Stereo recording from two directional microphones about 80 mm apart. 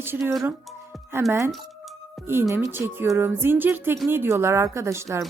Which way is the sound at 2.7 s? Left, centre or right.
Right.